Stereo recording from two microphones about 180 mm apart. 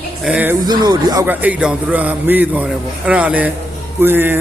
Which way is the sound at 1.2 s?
10° right (ahead or behind).